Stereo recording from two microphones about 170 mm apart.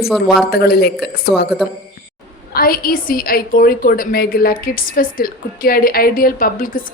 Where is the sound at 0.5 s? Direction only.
70° left (ahead or behind).